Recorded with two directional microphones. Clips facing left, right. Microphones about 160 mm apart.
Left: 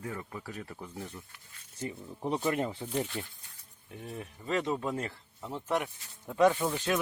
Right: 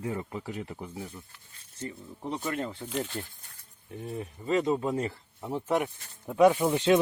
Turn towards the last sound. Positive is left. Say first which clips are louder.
# right 7 dB
turn(degrees=-25)  # may be behind; listen again after turning